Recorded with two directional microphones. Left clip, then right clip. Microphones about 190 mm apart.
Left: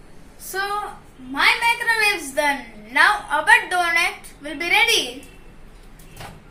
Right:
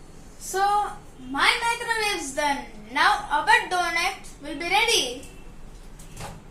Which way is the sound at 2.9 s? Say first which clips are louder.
Left 4 dB; 5° left (ahead or behind).